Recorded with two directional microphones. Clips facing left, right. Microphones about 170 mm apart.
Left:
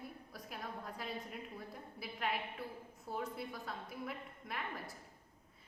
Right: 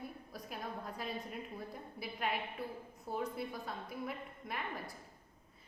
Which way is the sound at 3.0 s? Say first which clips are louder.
Right 3 dB; 20° right (ahead or behind).